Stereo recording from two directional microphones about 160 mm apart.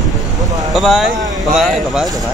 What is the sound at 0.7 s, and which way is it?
Speech, centre (ahead or behind).